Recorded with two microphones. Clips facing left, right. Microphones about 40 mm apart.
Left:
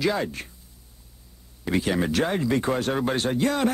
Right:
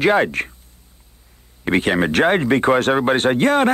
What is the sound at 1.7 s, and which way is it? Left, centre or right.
Speech, right.